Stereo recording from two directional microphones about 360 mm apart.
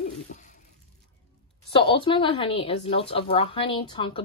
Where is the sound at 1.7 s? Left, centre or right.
Centre.